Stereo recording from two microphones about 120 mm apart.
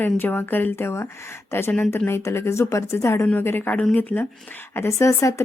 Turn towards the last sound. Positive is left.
turn(degrees=25)  # may be behind; listen again after turning